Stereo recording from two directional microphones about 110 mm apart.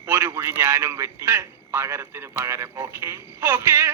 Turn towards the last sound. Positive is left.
turn(degrees=-25)  # may be behind; listen again after turning